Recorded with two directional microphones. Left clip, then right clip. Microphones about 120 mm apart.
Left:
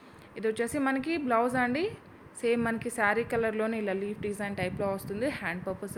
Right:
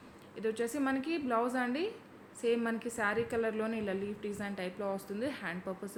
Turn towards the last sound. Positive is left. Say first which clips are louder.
# left 5 dB
turn(degrees=40)  # may be behind; listen again after turning